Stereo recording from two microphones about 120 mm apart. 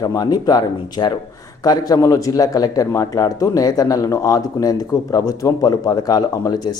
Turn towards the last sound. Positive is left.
turn(degrees=30)  # may be behind; listen again after turning